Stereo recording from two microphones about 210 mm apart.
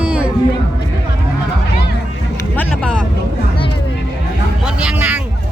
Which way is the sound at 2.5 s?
5° left (ahead or behind).